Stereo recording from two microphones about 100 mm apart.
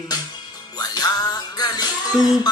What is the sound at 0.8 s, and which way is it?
Music, 40° left (ahead or behind).